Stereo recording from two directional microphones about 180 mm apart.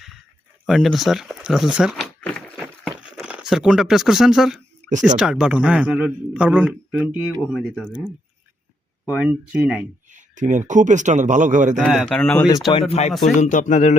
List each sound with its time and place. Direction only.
0.7 s a sound: centre (ahead or behind)
3.0 s a man's voice: 5° right (ahead or behind)
9.0 s speech: 5° right (ahead or behind)
10.1 s speech: 45° right (ahead or behind)
11.8 s speech: centre (ahead or behind)
12.9 s speech: 40° left (ahead or behind)